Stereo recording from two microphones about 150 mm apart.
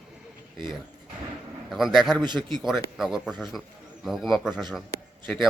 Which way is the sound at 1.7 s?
Centre (ahead or behind).